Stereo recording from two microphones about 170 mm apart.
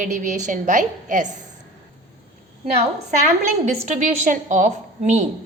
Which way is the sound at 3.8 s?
45° right (ahead or behind).